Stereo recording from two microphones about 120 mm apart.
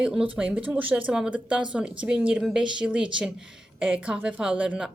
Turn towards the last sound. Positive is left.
turn(degrees=-10)  # may be behind; listen again after turning